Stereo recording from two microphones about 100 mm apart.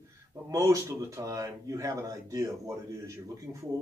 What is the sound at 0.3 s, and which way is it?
Speech, 35° right (ahead or behind).